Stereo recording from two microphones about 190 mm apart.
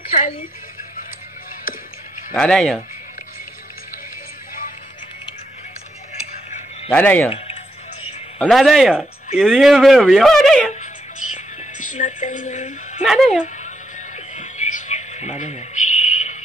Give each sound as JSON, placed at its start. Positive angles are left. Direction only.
{"t": 0.1, "sound": "speech", "side_deg": 45}
{"t": 2.3, "sound": "speech", "side_deg": 5}
{"t": 6.9, "sound": "speech", "side_deg": 10}
{"t": 7.2, "sound": "speech", "side_deg": 30}
{"t": 8.4, "sound": "speech", "side_deg": 0}
{"t": 11.9, "sound": "a woman's voice", "side_deg": 40}
{"t": 13.0, "sound": "speech", "side_deg": 0}
{"t": 14.1, "sound": "a sound", "side_deg": 40}